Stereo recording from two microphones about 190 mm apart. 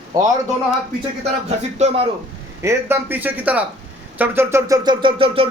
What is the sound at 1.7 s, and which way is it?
Speech, 35° right (ahead or behind).